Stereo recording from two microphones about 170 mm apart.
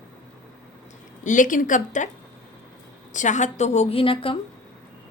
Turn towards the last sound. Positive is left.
turn(degrees=30)  # may be behind; listen again after turning